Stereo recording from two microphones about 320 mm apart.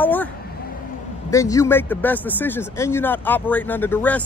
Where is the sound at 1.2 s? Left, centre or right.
Centre.